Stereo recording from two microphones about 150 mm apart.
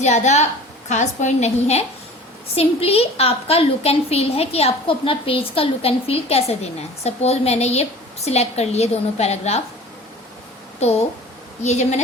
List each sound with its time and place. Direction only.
0.0 s a woman's voice: 50° left (ahead or behind)
10.8 s a woman's voice: 45° left (ahead or behind)